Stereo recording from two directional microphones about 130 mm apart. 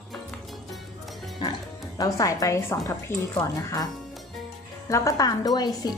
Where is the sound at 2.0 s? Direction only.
25° left (ahead or behind).